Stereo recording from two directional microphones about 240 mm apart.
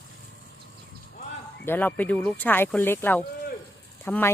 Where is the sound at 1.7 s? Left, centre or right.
Centre.